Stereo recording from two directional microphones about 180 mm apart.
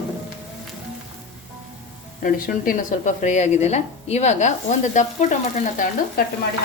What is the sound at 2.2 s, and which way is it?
A woman's voice, 50° left (ahead or behind).